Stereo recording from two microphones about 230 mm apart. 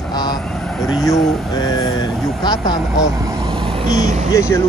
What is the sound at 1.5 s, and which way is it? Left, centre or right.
Speech, centre.